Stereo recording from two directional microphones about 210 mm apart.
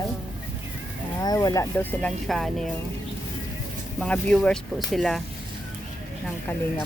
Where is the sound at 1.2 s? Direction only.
20° left (ahead or behind); by 2.7 s centre (ahead or behind).